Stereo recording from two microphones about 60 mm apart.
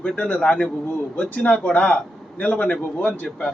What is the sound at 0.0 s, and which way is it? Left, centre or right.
A man's voice, centre.